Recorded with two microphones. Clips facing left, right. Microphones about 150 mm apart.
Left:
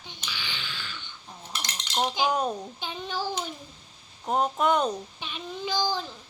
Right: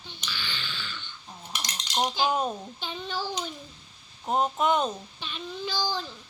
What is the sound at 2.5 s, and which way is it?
Speech, 10° left (ahead or behind).